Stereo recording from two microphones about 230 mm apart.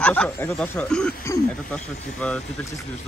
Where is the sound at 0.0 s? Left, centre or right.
Centre.